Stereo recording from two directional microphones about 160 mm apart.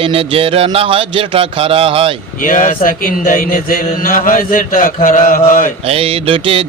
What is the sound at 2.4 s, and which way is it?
Mantra, 55° left (ahead or behind).